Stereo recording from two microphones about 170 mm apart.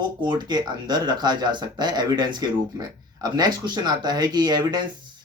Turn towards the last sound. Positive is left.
turn(degrees=-25)  # may be behind; listen again after turning